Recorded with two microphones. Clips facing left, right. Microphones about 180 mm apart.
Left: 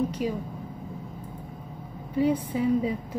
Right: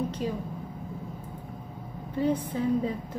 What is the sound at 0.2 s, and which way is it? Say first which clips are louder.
Speech: left 2 dB; 10° left (ahead or behind).